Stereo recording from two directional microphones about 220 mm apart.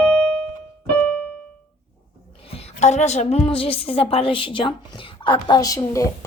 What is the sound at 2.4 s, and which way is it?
A woman's voice, 30° left (ahead or behind).